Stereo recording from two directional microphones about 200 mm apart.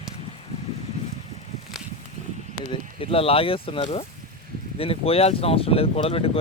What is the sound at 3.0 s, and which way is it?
Speech, 30° left (ahead or behind).